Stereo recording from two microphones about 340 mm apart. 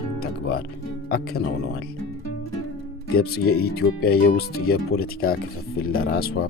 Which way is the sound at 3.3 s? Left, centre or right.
Left.